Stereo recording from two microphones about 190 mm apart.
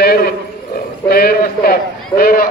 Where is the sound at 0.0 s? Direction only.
55° left (ahead or behind).